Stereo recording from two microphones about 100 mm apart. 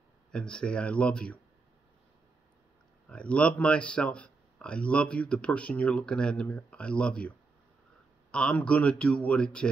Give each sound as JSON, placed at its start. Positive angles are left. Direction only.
{"t": 0.3, "sound": "speech", "side_deg": 10}
{"t": 3.1, "sound": "speech", "side_deg": 10}